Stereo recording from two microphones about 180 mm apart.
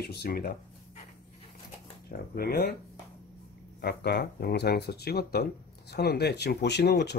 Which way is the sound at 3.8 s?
60° left (ahead or behind).